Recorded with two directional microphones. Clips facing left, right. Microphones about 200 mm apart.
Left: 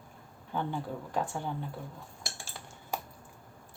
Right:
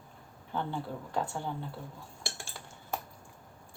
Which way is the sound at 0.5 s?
15° left (ahead or behind).